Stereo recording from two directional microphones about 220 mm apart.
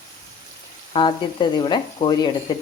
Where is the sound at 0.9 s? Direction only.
20° left (ahead or behind).